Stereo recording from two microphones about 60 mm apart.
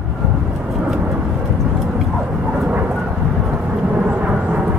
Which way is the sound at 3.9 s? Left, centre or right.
Right.